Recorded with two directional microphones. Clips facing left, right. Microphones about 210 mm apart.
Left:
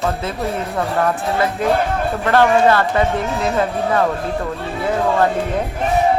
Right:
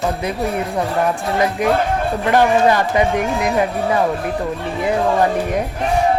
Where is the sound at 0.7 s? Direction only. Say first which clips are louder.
Left 2 dB; 15° right (ahead or behind).